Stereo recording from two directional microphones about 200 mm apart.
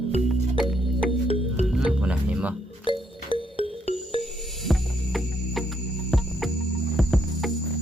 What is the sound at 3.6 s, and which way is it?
Music, 30° left (ahead or behind).